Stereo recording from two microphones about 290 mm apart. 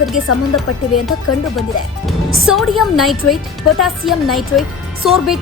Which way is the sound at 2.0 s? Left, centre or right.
Centre.